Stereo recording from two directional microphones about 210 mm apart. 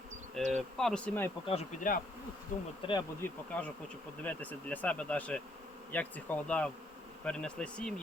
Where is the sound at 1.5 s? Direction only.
35° left (ahead or behind).